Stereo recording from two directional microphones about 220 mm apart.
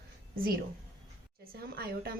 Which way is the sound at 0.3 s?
40° right (ahead or behind).